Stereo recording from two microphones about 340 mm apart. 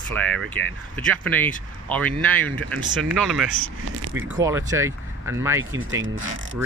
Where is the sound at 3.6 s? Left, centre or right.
Right.